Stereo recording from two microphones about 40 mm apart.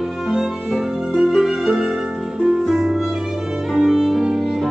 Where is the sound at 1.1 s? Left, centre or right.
Centre.